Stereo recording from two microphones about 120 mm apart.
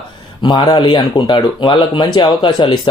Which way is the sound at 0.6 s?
35° left (ahead or behind).